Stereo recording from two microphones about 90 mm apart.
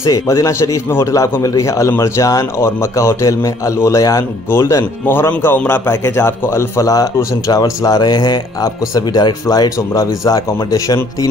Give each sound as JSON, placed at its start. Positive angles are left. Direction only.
{"t": 0.0, "sound": "a man's voice", "side_deg": 35}
{"t": 6.9, "sound": "speech", "side_deg": 40}
{"t": 8.9, "sound": "speech", "side_deg": 45}